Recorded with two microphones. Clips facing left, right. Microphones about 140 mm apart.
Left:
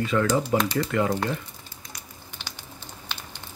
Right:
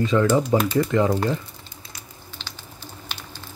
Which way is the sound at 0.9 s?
20° right (ahead or behind).